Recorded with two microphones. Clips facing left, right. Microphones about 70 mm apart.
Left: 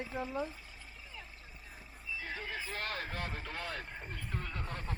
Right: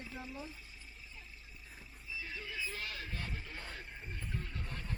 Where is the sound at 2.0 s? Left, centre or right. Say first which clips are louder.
Left 4 dB; left.